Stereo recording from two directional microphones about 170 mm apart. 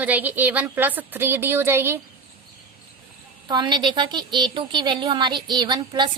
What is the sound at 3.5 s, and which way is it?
A woman's voice, 25° right (ahead or behind).